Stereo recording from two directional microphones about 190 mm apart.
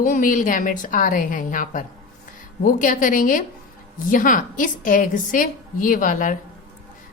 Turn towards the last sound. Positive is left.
turn(degrees=45)  # may be behind; listen again after turning